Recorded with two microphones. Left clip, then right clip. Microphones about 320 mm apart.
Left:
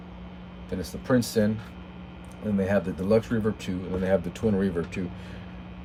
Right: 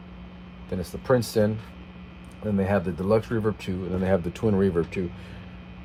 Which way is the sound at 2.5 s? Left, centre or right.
Centre.